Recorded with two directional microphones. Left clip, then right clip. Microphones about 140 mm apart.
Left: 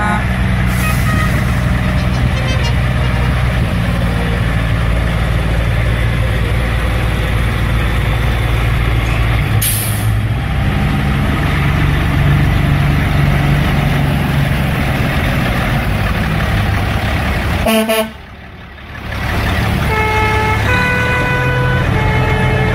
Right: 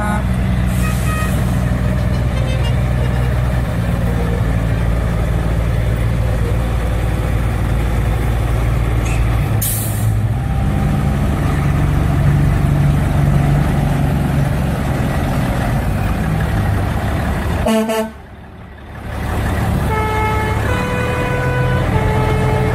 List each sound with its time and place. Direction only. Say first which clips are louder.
17.6 s vehicle: left 3 dB; 25° left (ahead or behind)